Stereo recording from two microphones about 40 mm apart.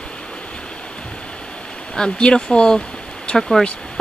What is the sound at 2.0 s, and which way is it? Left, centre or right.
Speech, left.